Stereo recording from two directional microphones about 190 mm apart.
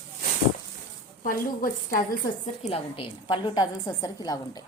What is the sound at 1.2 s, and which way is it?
Speech, 45° left (ahead or behind).